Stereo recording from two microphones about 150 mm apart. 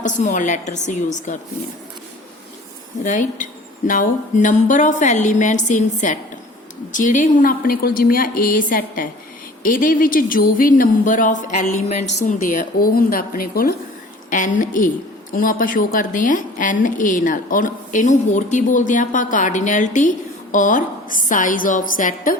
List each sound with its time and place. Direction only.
0.0 s a woman's voice: 55° left (ahead or behind)
3.0 s a woman's voice: 55° left (ahead or behind); by 13.7 s 85° left
14.3 s a woman's voice: 60° left (ahead or behind)